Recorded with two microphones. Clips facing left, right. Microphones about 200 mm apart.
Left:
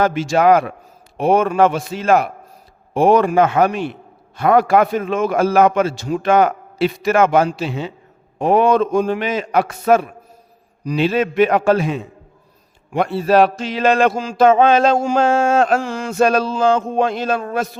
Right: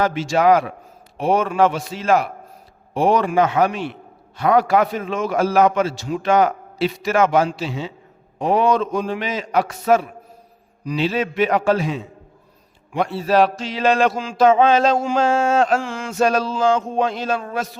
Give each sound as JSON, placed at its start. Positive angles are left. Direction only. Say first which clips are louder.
{"t": 0.0, "sound": "a man's voice", "louder": "left 2 dB", "side_deg": 50}
{"t": 15.3, "sound": "a sound", "louder": "left 1 dB", "side_deg": 60}
{"t": 15.8, "sound": "a man's voice", "louder": "left 3 dB", "side_deg": 40}